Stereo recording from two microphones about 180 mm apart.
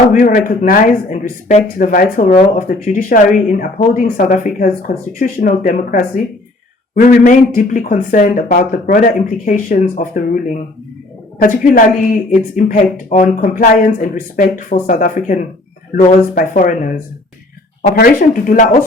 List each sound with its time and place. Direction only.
0.1 s speech: 50° left (ahead or behind)
17.9 s speech: 50° left (ahead or behind)